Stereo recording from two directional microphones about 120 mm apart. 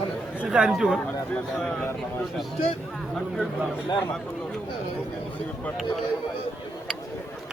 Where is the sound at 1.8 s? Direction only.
20° left (ahead or behind).